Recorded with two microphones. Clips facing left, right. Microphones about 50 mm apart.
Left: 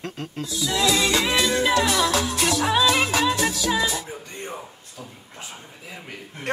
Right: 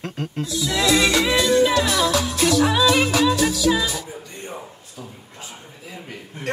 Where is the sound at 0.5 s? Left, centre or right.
Right.